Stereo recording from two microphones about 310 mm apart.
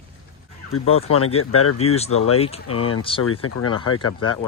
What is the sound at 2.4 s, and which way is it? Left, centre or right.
Speech, centre.